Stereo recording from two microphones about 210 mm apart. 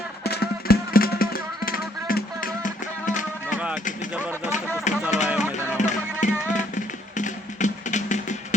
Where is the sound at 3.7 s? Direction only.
40° left (ahead or behind).